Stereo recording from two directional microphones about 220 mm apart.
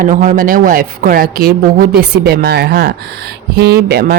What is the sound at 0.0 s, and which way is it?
Speech, 35° right (ahead or behind).